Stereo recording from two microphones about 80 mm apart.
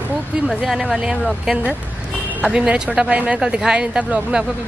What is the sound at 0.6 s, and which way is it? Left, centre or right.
Speech, centre.